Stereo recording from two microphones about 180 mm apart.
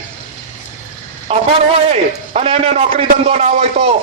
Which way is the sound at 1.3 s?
30° right (ahead or behind).